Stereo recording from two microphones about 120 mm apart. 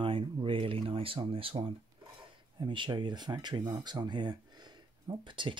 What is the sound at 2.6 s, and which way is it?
Speech, 40° right (ahead or behind).